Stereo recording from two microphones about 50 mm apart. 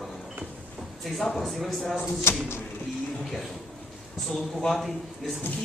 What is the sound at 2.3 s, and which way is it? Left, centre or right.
Speech, left.